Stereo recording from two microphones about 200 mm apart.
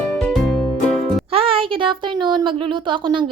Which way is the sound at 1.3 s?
25° right (ahead or behind).